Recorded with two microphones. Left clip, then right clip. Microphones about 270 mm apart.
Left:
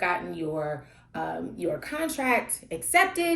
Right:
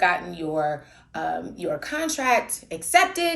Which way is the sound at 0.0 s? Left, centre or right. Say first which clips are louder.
Right 5 dB; right.